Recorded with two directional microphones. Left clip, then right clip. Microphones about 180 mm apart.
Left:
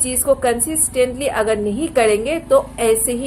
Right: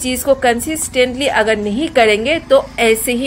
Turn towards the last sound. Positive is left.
turn(degrees=-35)  # may be behind; listen again after turning